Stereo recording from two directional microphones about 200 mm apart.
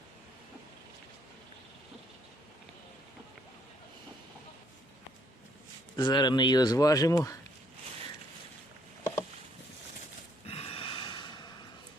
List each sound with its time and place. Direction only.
6.0 s speech: 20° left (ahead or behind)
10.4 s snort: 30° left (ahead or behind)